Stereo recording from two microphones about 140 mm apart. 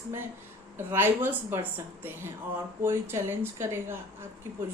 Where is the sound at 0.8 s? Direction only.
15° right (ahead or behind).